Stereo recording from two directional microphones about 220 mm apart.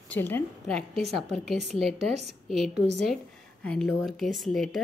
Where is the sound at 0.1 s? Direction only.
10° left (ahead or behind).